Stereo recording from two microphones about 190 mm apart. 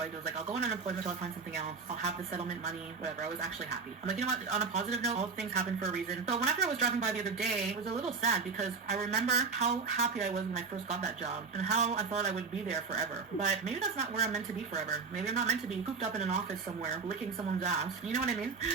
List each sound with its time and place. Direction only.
0.0 s a woman's voice: 35° right (ahead or behind)